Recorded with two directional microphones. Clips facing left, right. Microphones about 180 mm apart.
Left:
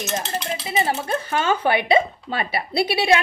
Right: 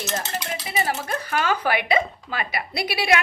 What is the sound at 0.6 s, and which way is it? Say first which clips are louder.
Speech: left 3 dB; 25° left (ahead or behind).